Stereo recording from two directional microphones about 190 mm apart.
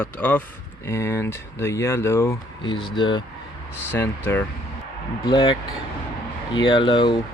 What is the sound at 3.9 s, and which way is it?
Speech, 10° left (ahead or behind).